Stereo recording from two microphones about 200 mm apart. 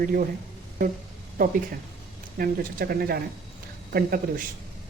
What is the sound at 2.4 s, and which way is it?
Speech, 50° right (ahead or behind).